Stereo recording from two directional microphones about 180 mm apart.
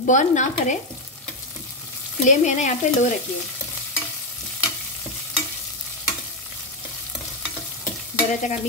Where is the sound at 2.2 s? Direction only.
40° left (ahead or behind).